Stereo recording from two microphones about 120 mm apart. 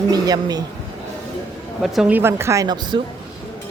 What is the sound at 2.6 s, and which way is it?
Speech, 35° right (ahead or behind).